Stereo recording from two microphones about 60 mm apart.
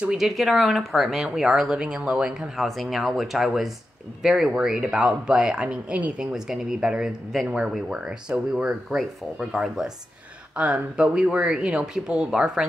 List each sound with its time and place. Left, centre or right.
0.2 s speech: centre
2.5 s speech: centre; by 6.2 s right
6.3 s speech: centre